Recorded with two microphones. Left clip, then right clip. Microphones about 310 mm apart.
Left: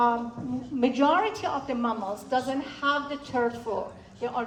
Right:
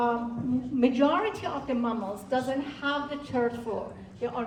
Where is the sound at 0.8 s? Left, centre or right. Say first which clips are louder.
Left 2 dB; centre.